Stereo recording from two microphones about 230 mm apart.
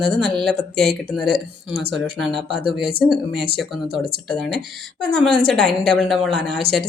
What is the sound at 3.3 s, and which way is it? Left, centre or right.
Speech, right.